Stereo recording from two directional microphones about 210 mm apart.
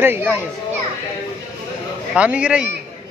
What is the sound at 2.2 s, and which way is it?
Speech, 5° right (ahead or behind).